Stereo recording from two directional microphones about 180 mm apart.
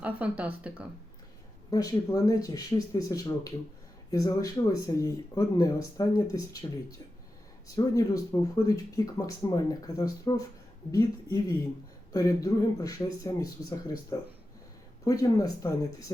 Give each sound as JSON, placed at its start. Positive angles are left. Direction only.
{"t": 0.0, "sound": "speech", "side_deg": -10}
{"t": 1.7, "sound": "speech", "side_deg": 20}
{"t": 7.8, "sound": "speech", "side_deg": 20}